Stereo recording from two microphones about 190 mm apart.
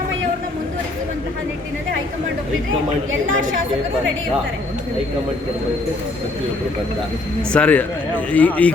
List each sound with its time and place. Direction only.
3.1 s a woman's voice: 90° right
7.5 s a man's voice: 5° left (ahead or behind)